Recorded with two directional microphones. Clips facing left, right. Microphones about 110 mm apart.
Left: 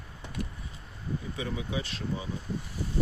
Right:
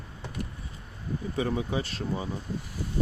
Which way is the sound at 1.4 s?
40° right (ahead or behind).